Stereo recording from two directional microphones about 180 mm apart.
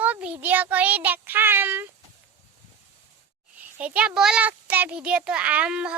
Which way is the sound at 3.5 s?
10° right (ahead or behind).